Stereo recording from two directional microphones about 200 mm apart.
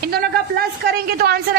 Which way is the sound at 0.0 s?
50° right (ahead or behind).